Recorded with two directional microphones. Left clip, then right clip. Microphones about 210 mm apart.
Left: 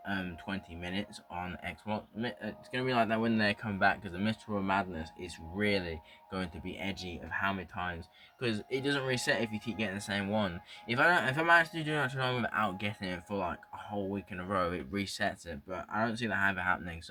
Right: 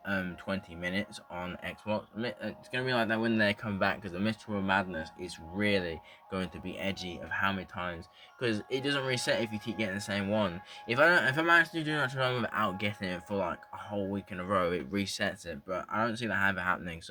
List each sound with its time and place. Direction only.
0.0 s speech: 35° right (ahead or behind)